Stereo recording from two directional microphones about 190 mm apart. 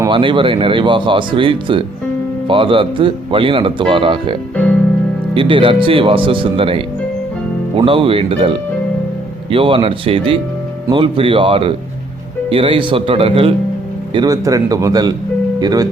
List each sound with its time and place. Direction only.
0.1 s speech: 25° right (ahead or behind)